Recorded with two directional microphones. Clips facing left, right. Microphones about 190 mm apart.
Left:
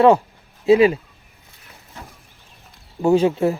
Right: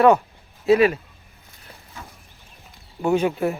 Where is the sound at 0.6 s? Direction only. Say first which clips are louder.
Left 3 dB; 25° left (ahead or behind).